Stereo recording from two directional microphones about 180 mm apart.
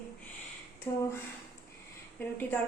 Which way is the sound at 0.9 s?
20° left (ahead or behind).